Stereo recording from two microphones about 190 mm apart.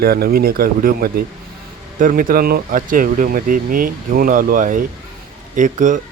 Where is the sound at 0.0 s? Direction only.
55° right (ahead or behind).